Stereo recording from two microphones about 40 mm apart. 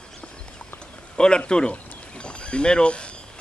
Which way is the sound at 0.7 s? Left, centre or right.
Centre.